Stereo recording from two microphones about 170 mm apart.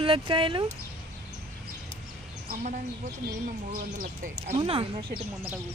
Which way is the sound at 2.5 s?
45° right (ahead or behind).